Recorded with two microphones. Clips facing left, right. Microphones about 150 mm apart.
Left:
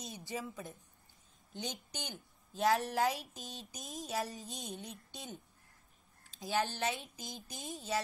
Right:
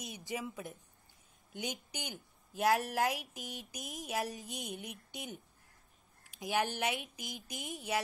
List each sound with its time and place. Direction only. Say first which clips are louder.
0.0 s speech: right 1 dB; 15° right (ahead or behind)
2.0 s speech: right 1 dB; 10° right (ahead or behind)